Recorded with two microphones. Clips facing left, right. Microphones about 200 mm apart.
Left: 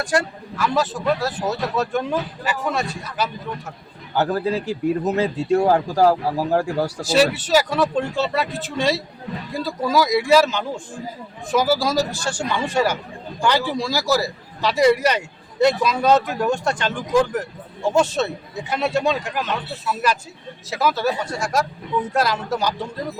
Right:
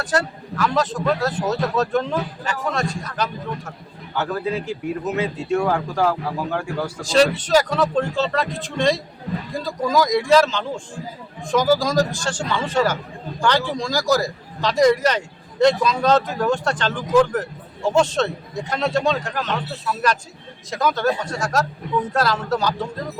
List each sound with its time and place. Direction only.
0.0 s a man's voice: 10° left (ahead or behind)
4.1 s speech: 35° left (ahead or behind)
7.1 s a man's voice: 5° left (ahead or behind)